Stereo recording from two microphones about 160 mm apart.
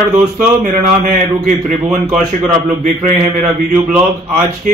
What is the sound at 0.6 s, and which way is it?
Speech, 50° right (ahead or behind).